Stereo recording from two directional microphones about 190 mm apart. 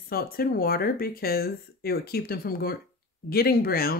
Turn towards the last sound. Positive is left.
turn(degrees=50)  # may be behind; listen again after turning